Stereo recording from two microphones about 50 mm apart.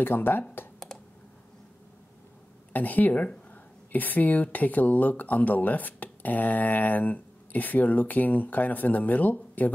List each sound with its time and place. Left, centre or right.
0.0 s speech: left
2.7 s speech: left